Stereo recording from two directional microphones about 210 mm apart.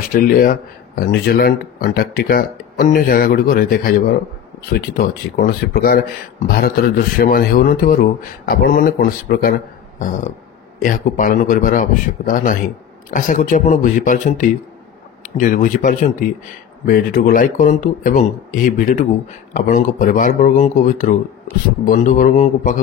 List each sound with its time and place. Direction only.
0.1 s a man's voice: 40° left (ahead or behind)